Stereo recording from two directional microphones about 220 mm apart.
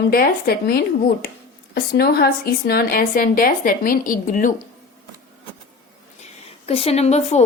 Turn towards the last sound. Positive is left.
turn(degrees=30)  # may be behind; listen again after turning